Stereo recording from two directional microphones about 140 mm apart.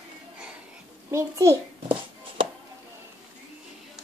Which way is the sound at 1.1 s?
20° right (ahead or behind).